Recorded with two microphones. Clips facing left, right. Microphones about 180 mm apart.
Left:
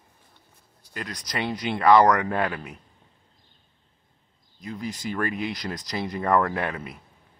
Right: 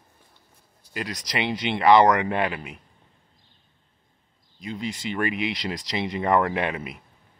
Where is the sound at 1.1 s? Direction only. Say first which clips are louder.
Right 3 dB; 85° right.